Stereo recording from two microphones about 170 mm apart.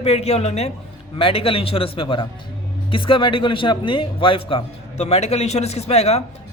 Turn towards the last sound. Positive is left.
turn(degrees=40)  # may be behind; listen again after turning